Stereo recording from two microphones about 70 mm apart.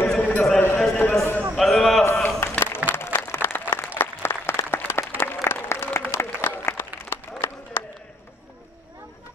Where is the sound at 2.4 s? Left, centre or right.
Left.